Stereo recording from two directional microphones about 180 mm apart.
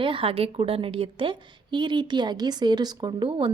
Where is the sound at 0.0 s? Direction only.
30° right (ahead or behind).